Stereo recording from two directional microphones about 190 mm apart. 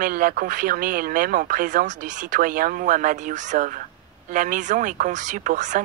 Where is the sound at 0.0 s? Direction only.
50° right (ahead or behind).